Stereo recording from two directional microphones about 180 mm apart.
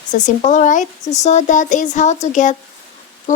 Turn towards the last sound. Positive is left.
turn(degrees=45)  # may be behind; listen again after turning